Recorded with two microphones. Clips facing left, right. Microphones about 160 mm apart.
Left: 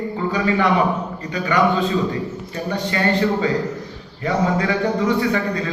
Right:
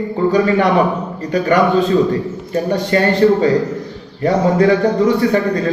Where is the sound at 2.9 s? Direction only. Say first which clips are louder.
Right 8 dB; 45° right (ahead or behind).